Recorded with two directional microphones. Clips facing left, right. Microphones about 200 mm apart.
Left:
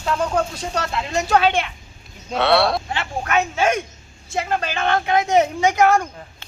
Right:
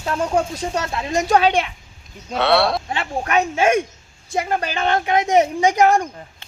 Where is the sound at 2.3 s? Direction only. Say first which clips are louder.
Even; centre (ahead or behind).